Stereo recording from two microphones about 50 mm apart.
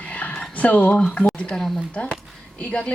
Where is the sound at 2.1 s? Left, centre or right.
Left.